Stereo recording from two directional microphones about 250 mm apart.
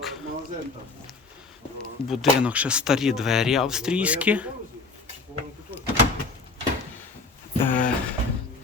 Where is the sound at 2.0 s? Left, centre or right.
Centre.